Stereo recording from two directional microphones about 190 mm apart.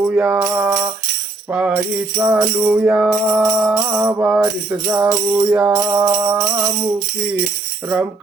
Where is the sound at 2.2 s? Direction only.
10° right (ahead or behind).